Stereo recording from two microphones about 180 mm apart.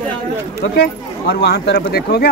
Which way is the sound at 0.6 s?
60° left (ahead or behind).